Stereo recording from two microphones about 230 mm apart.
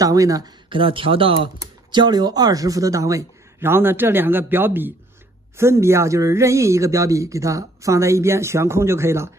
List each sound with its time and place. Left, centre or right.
0.0 s speech: centre